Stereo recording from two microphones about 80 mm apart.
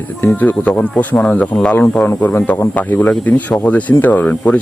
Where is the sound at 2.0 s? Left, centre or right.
Centre.